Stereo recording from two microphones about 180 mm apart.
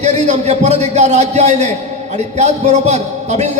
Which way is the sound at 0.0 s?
40° right (ahead or behind).